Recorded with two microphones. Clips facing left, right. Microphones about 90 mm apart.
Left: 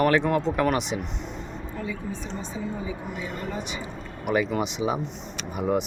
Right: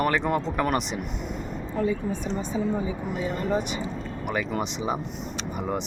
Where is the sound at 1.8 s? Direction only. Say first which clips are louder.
Right 8 dB; 40° right (ahead or behind).